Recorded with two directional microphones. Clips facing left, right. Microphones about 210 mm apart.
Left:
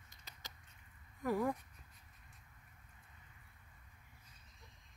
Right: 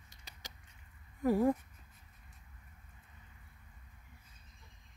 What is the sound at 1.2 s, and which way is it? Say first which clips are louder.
Speech: right 7 dB; 30° right (ahead or behind).